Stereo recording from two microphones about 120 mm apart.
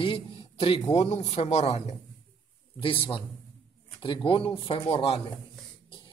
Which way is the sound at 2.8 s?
45° left (ahead or behind).